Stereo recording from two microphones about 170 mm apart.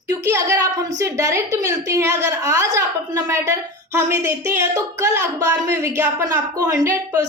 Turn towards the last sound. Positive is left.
turn(degrees=-20)  # may be behind; listen again after turning